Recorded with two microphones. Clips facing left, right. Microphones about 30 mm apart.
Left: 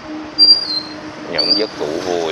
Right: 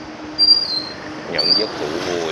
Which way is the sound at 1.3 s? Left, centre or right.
Centre.